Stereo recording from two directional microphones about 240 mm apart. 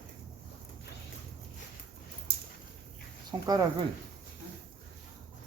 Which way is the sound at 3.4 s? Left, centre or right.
Centre.